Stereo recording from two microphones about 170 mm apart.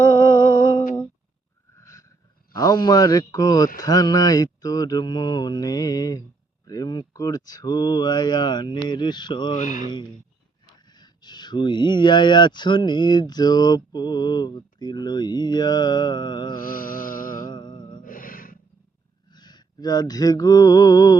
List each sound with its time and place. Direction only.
0.0 s music: 15° left (ahead or behind)
1.7 s a sound: 15° left (ahead or behind)
3.8 s speech: 20° left (ahead or behind)
9.6 s speech: 50° left (ahead or behind)
10.8 s speech: 25° left (ahead or behind)
16.6 s mantra: 55° left (ahead or behind)
17.4 s mantra: 25° left (ahead or behind)
18.0 s gasp: 55° left (ahead or behind)
19.3 s a sound: 25° left (ahead or behind)